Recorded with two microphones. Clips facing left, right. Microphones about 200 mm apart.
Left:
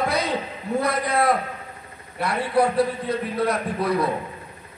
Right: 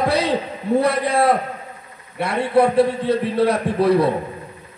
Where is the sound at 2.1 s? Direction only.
25° right (ahead or behind).